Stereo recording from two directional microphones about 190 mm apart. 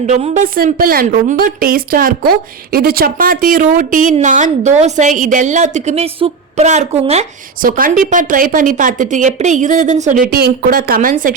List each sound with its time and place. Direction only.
0.0 s speech: 40° right (ahead or behind)
7.6 s speech: 45° right (ahead or behind)